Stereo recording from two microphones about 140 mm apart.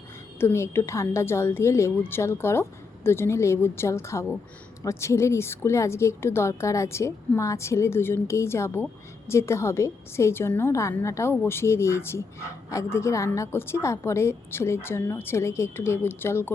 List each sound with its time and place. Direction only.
0.3 s a woman's voice: 15° left (ahead or behind)